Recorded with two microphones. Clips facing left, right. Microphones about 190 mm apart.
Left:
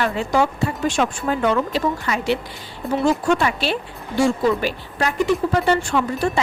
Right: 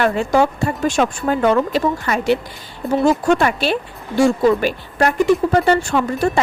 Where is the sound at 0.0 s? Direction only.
45° right (ahead or behind).